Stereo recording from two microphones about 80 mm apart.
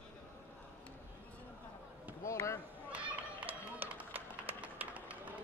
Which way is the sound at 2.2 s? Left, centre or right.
Left.